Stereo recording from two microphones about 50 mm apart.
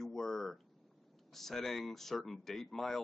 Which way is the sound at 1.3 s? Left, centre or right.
Centre.